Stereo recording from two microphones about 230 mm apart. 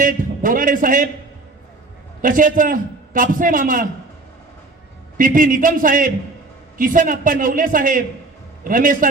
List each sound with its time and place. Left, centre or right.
0.0 s a man's voice: right
2.2 s a man's voice: right
5.1 s a man's voice: right